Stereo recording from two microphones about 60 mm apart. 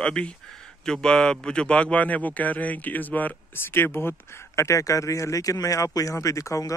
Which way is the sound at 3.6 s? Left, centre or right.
Left.